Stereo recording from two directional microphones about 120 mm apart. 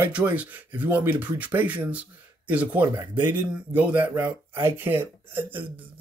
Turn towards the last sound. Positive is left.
turn(degrees=-15)  # may be behind; listen again after turning